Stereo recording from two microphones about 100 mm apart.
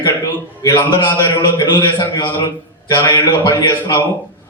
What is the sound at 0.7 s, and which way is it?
A man's voice, 50° left (ahead or behind).